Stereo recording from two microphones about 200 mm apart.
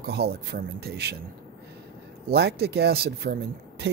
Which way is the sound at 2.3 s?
55° right (ahead or behind).